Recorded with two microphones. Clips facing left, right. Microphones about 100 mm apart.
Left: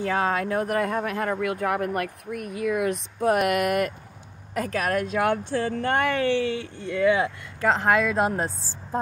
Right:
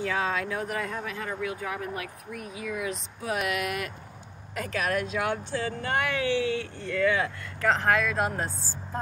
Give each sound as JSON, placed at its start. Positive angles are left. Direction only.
{"t": 0.0, "sound": "speech", "side_deg": 50}
{"t": 6.8, "sound": "speech", "side_deg": 20}